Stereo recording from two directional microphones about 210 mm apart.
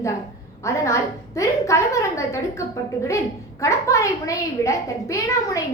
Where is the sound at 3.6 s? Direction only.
15° left (ahead or behind).